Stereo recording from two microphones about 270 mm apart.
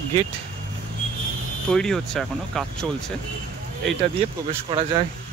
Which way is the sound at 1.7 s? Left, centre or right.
Centre.